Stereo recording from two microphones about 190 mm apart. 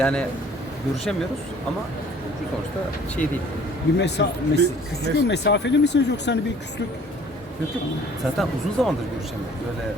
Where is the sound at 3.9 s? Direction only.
65° left (ahead or behind).